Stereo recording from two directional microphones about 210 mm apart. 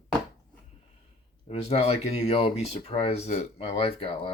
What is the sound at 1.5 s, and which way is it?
Speech, 30° left (ahead or behind).